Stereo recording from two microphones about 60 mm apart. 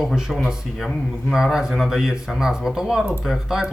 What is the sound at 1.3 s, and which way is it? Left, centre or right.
Speech, centre.